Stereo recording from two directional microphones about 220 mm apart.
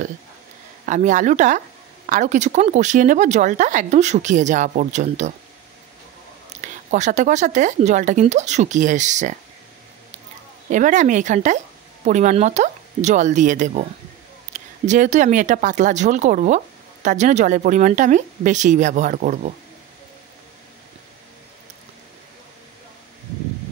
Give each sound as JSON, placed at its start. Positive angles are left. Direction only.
{"t": 0.8, "sound": "speech", "side_deg": -35}
{"t": 6.6, "sound": "speech", "side_deg": -35}
{"t": 10.7, "sound": "speech", "side_deg": -35}
{"t": 14.5, "sound": "a sound", "side_deg": -30}
{"t": 14.9, "sound": "speech", "side_deg": -35}